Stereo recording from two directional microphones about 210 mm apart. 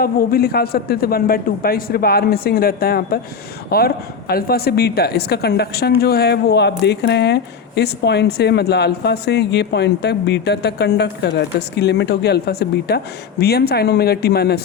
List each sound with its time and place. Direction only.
0.0 s a woman's voice: 45° left (ahead or behind)